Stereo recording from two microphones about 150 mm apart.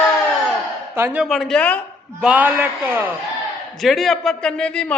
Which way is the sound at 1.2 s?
Centre (ahead or behind).